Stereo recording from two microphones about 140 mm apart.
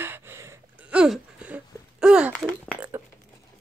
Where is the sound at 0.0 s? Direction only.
15° right (ahead or behind).